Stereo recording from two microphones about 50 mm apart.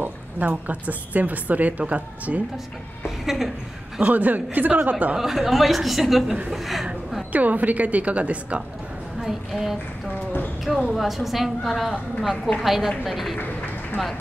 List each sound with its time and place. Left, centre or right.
0.0 s a woman's voice: right
3.3 s a woman's voice: centre
4.0 s a woman's voice: right
5.1 s a woman's voice: centre
7.3 s a woman's voice: right
9.2 s a woman's voice: centre
10.9 s a woman's voice: centre